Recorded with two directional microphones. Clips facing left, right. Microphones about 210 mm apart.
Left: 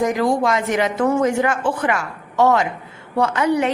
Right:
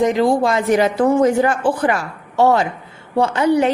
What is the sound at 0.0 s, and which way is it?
A woman's voice, 25° right (ahead or behind).